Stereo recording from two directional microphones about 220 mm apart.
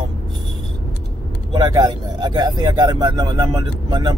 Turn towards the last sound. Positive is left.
turn(degrees=-20)  # may be behind; listen again after turning